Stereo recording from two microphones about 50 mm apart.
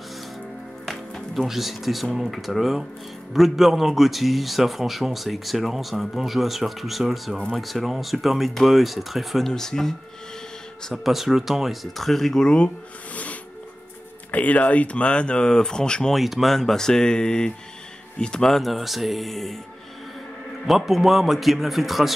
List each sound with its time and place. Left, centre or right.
0.8 s music: centre
2.1 s a man's voice: centre
9.5 s speech: centre
11.1 s a man's voice: centre
12.4 s speech: left
16.1 s speech: centre
18.6 s a man's voice: centre
20.6 s a man's voice: centre